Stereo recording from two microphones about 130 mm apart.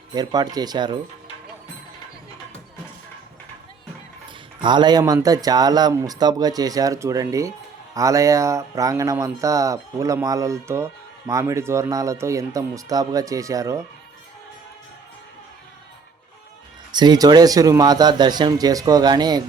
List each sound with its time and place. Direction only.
0.1 s a man's voice: 30° right (ahead or behind)
4.6 s speech: 35° right (ahead or behind)
16.9 s a man's voice: 35° right (ahead or behind)